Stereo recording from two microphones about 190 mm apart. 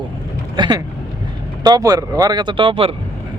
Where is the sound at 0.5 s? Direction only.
25° right (ahead or behind).